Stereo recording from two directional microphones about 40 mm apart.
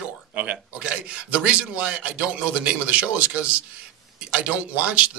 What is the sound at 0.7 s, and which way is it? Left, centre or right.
Speech, right.